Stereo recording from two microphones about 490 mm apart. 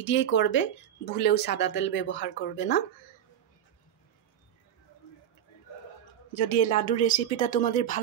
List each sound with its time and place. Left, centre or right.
0.0 s speech: left
6.3 s speech: centre